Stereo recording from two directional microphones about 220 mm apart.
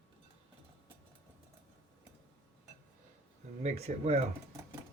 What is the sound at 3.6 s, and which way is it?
Speech, 30° right (ahead or behind).